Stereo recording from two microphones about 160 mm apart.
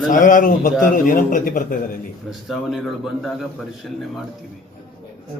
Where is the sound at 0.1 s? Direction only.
60° left (ahead or behind).